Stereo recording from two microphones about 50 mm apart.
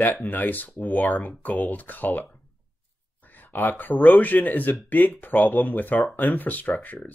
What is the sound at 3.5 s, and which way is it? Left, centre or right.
Speech, left.